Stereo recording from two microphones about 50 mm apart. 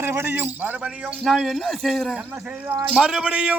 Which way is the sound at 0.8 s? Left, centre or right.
Right.